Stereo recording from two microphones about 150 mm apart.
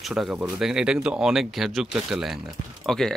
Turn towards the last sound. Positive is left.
turn(degrees=5)  # may be behind; listen again after turning